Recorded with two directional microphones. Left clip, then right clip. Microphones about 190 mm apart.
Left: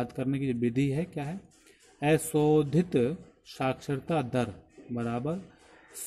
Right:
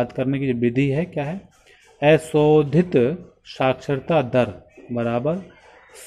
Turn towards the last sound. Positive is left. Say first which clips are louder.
# right 11 dB
turn(degrees=15)  # may be behind; listen again after turning